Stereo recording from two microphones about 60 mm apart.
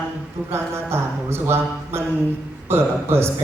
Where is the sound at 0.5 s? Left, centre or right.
Right.